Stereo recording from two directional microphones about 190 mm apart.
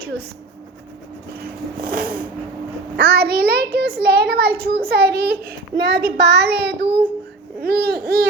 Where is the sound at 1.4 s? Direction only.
50° right (ahead or behind).